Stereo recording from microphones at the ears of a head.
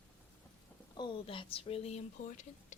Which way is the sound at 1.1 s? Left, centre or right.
Left.